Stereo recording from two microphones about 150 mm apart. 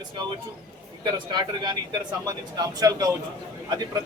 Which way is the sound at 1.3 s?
30° right (ahead or behind).